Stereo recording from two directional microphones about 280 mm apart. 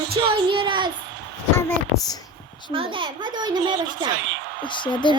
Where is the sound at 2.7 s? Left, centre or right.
Centre.